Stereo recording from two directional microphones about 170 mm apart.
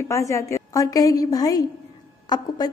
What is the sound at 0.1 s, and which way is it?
Speech, 20° left (ahead or behind).